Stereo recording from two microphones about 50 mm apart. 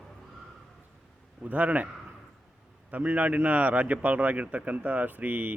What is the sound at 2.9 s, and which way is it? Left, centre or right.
Speech, right.